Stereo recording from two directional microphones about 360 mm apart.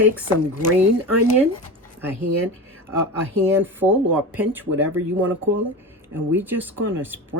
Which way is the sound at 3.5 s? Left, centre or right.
Centre.